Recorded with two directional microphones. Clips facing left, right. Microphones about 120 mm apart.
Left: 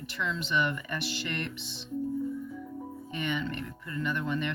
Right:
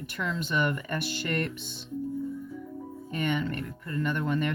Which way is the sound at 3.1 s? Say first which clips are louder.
Right 4 dB; 45° right (ahead or behind).